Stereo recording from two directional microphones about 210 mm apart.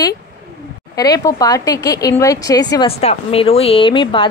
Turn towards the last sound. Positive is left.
turn(degrees=20)  # may be behind; listen again after turning